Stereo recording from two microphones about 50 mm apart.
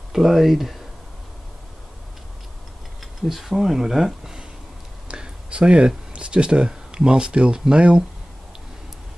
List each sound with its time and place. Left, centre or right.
0.1 s speech: centre
3.0 s speech: centre